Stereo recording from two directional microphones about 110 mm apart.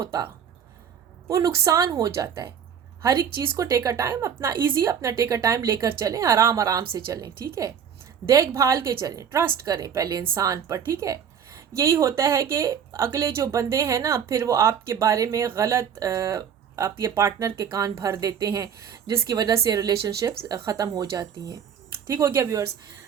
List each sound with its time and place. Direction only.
1.3 s a woman's voice: 30° right (ahead or behind)